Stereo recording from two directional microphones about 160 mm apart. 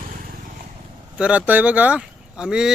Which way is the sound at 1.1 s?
10° right (ahead or behind).